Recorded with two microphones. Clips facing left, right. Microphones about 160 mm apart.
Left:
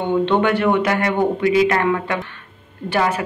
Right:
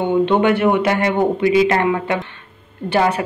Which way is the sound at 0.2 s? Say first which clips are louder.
Right 3 dB; 20° right (ahead or behind).